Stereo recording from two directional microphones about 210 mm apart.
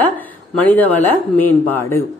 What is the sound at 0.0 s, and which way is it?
Speech, 5° left (ahead or behind).